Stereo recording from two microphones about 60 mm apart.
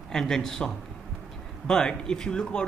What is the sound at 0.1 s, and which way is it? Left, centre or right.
Speech, centre.